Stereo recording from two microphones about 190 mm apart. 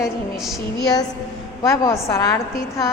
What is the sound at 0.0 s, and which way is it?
Speech, centre (ahead or behind).